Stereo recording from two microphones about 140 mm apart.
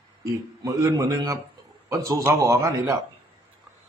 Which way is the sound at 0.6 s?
25° right (ahead or behind).